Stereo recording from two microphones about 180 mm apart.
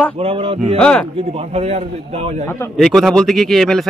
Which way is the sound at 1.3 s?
35° right (ahead or behind).